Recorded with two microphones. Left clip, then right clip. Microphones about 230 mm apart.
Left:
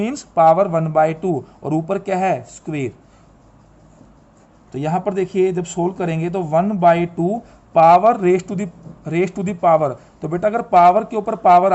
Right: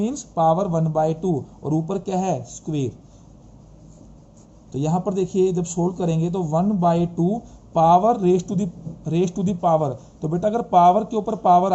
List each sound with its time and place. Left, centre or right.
0.3 s a man's voice: left
4.7 s speech: left